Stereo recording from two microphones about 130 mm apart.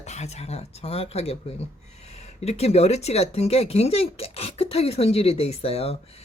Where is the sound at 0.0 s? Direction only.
60° left (ahead or behind).